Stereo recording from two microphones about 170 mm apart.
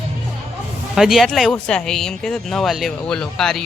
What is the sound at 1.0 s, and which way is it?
Speech, centre (ahead or behind).